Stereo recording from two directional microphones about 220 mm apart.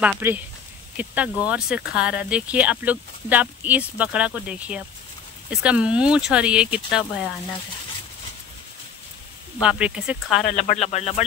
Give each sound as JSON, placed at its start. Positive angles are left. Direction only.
{"t": 0.0, "sound": "speech", "side_deg": -10}
{"t": 9.6, "sound": "speech", "side_deg": -5}
{"t": 10.5, "sound": "speech", "side_deg": 35}